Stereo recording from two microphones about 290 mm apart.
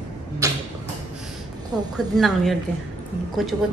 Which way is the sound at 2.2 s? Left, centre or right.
Centre.